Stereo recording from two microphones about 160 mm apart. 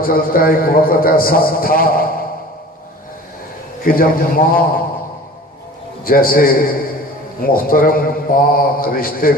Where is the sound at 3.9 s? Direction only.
65° left (ahead or behind).